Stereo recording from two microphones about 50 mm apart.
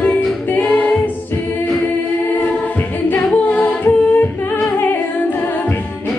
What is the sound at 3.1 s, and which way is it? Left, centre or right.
A capella, left.